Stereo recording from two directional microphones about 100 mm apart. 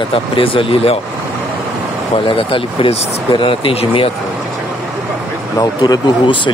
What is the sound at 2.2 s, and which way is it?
Speech, 60° left (ahead or behind).